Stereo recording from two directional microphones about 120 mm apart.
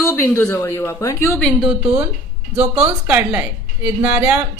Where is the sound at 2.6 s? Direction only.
10° right (ahead or behind).